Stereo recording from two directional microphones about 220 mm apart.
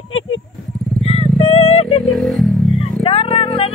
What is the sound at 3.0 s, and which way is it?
Music, 25° left (ahead or behind).